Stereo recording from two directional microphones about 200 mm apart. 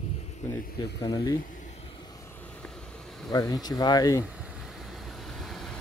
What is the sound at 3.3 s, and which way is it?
Speech, 20° left (ahead or behind).